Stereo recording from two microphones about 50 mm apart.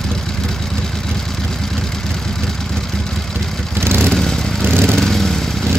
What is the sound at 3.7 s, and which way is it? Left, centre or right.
Vehicle, right.